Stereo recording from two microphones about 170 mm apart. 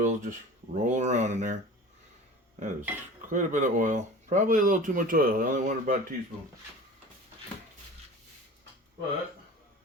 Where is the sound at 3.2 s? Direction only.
45° right (ahead or behind).